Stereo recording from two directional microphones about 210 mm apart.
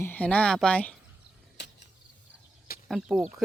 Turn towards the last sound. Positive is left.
turn(degrees=0)  # may be behind; listen again after turning